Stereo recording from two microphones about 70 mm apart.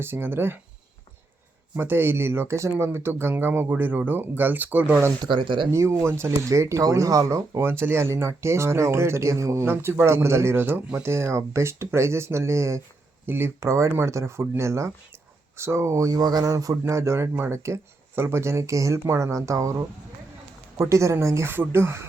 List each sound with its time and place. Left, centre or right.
0.0 s speech: right
1.7 s speech: right
5.7 s speech: right
9.6 s speech: right